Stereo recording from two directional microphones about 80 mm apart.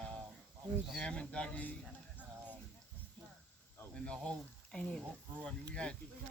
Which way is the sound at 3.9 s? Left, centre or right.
Centre.